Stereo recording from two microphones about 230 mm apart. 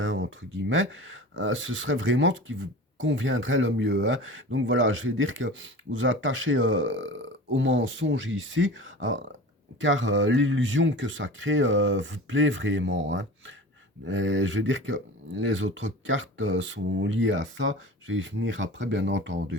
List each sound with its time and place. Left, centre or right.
0.0 s speech: right